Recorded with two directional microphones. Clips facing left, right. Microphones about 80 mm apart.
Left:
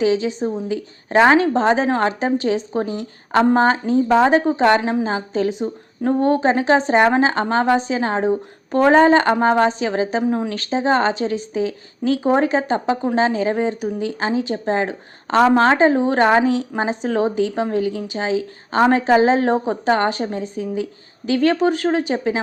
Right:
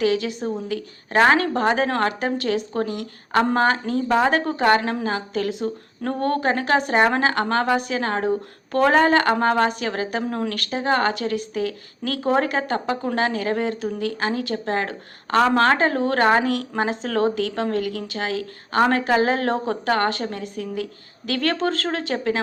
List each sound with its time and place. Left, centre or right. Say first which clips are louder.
0.0 s speech: left 3 dB; left